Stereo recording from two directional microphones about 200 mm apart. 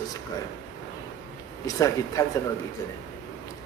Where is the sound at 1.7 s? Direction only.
15° left (ahead or behind).